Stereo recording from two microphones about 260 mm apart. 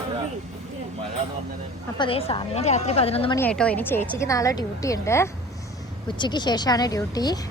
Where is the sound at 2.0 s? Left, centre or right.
Left.